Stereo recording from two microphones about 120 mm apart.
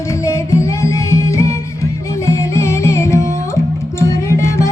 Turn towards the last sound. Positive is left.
turn(degrees=25)  # may be behind; listen again after turning